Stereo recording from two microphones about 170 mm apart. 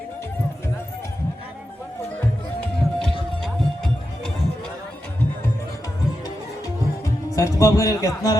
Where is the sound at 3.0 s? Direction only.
Centre (ahead or behind).